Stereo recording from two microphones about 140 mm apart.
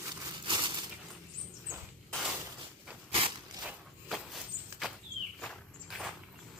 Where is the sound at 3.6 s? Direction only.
Centre (ahead or behind).